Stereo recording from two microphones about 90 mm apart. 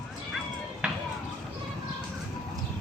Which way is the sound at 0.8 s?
10° right (ahead or behind).